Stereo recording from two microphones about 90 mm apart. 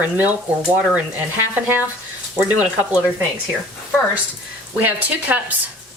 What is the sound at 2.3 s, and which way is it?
Speech, 15° right (ahead or behind).